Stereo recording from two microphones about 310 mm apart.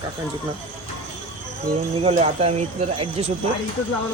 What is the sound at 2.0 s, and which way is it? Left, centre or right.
Speech, centre.